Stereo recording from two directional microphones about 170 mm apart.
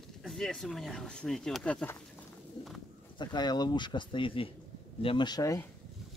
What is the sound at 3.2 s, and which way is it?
Speech, 25° left (ahead or behind).